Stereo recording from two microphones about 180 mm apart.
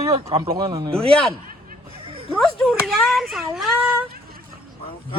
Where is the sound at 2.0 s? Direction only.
30° right (ahead or behind).